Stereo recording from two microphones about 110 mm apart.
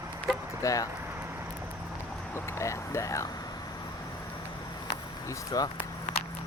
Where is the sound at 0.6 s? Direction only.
30° left (ahead or behind).